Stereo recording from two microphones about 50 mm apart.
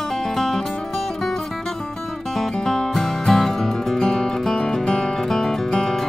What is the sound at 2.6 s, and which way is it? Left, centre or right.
Music, centre.